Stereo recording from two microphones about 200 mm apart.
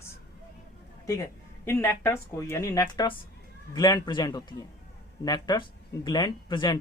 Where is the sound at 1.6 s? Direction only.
10° left (ahead or behind).